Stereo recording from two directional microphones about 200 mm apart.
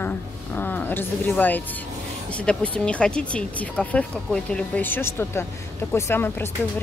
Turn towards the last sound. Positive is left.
turn(degrees=10)  # may be behind; listen again after turning